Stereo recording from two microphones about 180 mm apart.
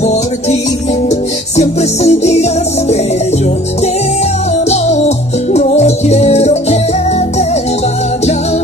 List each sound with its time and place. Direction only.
1.6 s music: 35° left (ahead or behind)
4.6 s music: 35° left (ahead or behind)